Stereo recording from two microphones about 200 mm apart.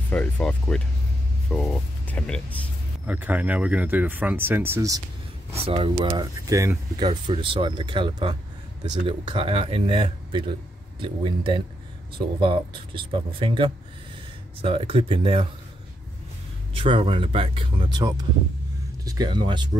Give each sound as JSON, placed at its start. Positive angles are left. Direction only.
{"t": 0.1, "sound": "speech", "side_deg": 5}
{"t": 3.1, "sound": "speech", "side_deg": -10}
{"t": 5.5, "sound": "speech", "side_deg": -30}
{"t": 7.1, "sound": "speech", "side_deg": -25}
{"t": 16.7, "sound": "speech", "side_deg": -25}